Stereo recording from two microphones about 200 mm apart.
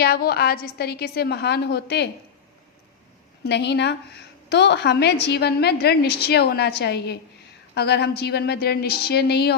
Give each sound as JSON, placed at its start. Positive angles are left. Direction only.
{"t": 0.0, "sound": "a woman's voice", "side_deg": 50}
{"t": 3.4, "sound": "a woman's voice", "side_deg": 55}